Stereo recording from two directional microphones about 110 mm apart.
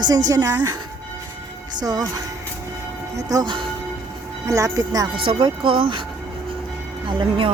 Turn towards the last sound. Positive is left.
turn(degrees=-50)  # may be behind; listen again after turning